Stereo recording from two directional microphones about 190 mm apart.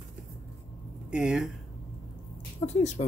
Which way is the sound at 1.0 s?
5° right (ahead or behind).